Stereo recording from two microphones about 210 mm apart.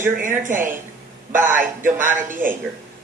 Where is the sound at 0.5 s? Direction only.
10° right (ahead or behind).